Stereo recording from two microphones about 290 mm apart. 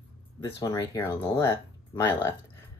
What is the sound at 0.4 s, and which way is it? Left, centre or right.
Speech, centre.